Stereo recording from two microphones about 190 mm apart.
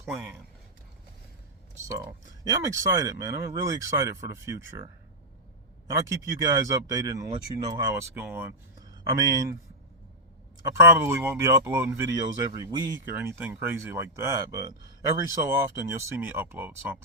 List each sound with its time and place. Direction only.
1.9 s speech: 15° right (ahead or behind)
5.9 s speech: 15° right (ahead or behind)
10.7 s speech: 15° right (ahead or behind)